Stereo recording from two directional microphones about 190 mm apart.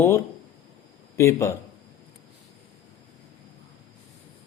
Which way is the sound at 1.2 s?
15° left (ahead or behind).